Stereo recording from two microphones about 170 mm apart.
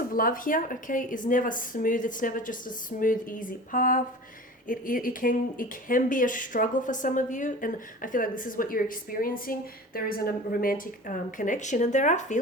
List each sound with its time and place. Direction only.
0.1 s speech: 55° left (ahead or behind)